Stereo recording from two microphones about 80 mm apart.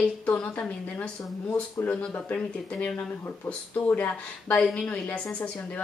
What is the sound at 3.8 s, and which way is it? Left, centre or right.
A woman's voice, left.